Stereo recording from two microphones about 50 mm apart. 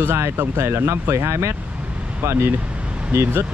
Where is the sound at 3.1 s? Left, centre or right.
Right.